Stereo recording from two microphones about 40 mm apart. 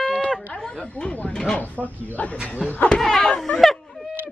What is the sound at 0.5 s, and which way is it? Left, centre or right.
Chatter, centre.